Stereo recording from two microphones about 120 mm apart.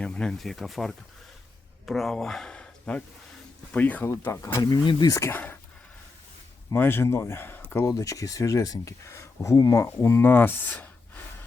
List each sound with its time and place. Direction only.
0.0 s speech: 5° left (ahead or behind)
4.6 s speech: 40° left (ahead or behind)
5.1 s speech: 20° left (ahead or behind)
6.7 s speech: 20° left (ahead or behind)
7.9 s speech: 30° left (ahead or behind); by 11.2 s 15° left (ahead or behind)